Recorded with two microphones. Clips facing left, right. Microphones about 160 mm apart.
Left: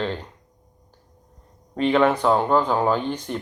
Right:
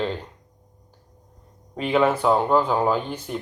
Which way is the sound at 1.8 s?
5° right (ahead or behind).